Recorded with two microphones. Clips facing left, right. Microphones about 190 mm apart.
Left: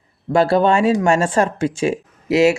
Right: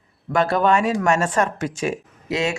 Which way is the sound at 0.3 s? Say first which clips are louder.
Left 4 dB; 30° left (ahead or behind).